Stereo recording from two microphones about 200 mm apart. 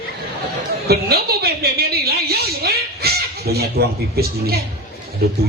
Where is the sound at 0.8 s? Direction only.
50° right (ahead or behind).